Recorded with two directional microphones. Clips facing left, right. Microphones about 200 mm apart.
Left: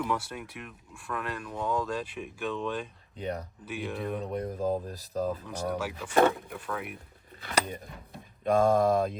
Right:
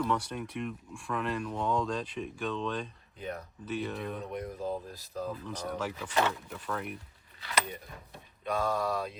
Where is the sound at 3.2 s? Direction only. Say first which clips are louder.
Left 5 dB; 35° left (ahead or behind).